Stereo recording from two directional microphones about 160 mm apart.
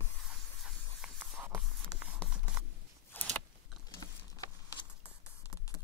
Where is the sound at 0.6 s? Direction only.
5° right (ahead or behind).